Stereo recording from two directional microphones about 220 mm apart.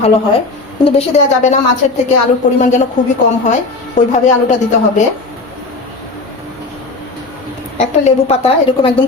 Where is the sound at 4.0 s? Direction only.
35° left (ahead or behind).